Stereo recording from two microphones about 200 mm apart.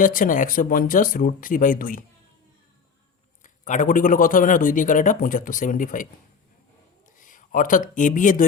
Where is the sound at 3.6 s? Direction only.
40° left (ahead or behind).